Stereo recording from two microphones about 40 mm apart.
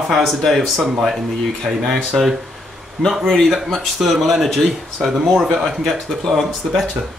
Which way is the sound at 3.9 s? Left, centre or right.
Centre.